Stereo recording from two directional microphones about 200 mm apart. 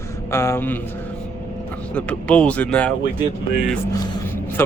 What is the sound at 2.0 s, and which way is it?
Speech, 5° left (ahead or behind).